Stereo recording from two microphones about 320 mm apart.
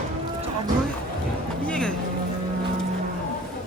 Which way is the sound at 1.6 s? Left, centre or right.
Centre.